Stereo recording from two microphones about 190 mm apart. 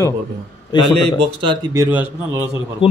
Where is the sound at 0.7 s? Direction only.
25° left (ahead or behind).